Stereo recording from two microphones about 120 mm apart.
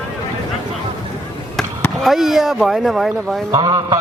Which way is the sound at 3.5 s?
30° right (ahead or behind).